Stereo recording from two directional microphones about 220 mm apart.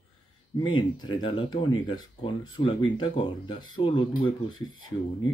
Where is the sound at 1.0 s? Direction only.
20° left (ahead or behind).